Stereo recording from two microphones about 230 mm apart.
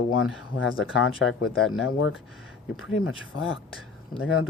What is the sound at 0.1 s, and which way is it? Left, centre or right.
Speech, left.